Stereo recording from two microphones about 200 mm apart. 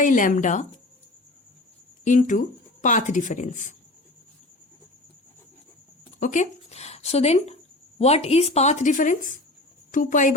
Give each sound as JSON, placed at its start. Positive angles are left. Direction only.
{"t": 0.0, "sound": "a woman's voice", "side_deg": 40}
{"t": 2.0, "sound": "a woman's voice", "side_deg": 40}
{"t": 6.1, "sound": "a woman's voice", "side_deg": 40}